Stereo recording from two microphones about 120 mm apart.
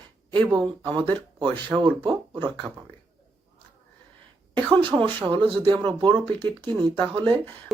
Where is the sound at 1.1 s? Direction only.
40° right (ahead or behind).